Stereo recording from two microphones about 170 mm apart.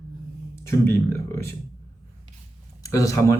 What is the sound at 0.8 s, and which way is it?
Speech, 15° left (ahead or behind).